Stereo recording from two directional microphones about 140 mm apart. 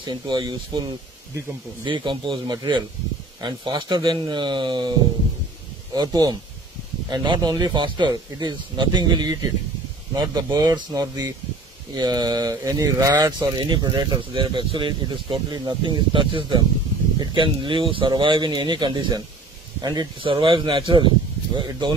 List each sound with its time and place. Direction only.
0.0 s speech: 30° right (ahead or behind)
1.9 s speech: 35° right (ahead or behind)
5.9 s speech: 25° right (ahead or behind)